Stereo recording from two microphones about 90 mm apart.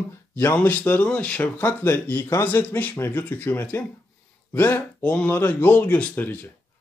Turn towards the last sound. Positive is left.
turn(degrees=20)  # may be behind; listen again after turning